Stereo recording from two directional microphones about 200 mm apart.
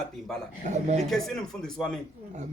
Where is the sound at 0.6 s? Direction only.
35° right (ahead or behind).